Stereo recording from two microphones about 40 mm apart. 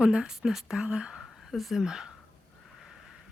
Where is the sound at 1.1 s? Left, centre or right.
Centre.